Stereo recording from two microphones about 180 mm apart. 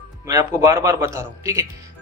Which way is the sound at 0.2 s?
20° right (ahead or behind).